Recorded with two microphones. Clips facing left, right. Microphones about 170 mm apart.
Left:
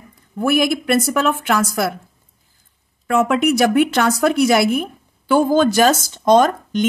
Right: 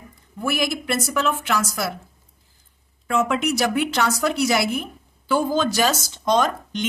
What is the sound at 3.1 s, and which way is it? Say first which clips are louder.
A woman's voice: left 5 dB; 55° left (ahead or behind).